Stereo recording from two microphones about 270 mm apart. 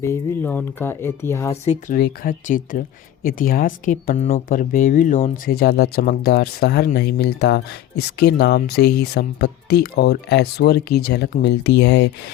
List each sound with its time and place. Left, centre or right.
0.0 s speech: centre
1.6 s speech: left
2.0 s speech: left